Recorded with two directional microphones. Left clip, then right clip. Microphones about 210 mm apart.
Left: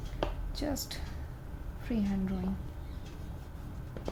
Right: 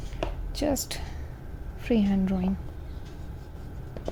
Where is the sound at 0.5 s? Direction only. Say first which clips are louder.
Right 9 dB; 30° right (ahead or behind).